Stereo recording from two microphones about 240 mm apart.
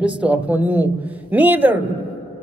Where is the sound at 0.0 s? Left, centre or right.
Centre.